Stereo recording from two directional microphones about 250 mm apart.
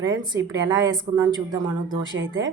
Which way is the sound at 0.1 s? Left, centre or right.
Centre.